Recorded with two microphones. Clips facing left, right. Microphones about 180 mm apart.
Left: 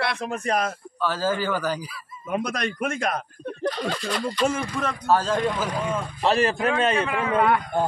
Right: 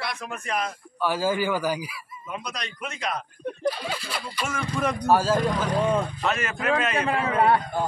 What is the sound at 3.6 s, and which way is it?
A man's voice, 10° right (ahead or behind).